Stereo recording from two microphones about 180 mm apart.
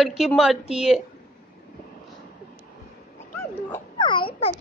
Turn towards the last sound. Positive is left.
turn(degrees=25)  # may be behind; listen again after turning